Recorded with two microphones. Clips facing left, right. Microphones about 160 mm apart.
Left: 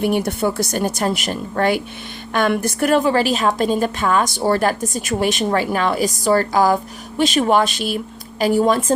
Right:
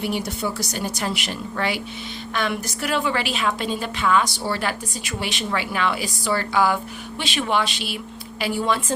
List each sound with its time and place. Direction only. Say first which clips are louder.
0.0 s a woman's voice: left 7 dB; 55° left (ahead or behind)